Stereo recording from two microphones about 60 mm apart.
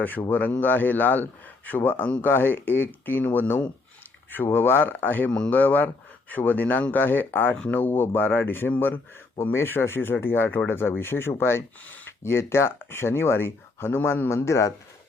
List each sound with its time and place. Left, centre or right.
0.0 s a man's voice: left
14.3 s a man's voice: left